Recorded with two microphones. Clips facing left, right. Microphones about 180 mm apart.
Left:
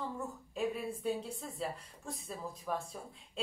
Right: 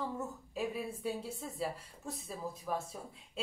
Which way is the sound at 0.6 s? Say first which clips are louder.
Left 1 dB; 5° right (ahead or behind).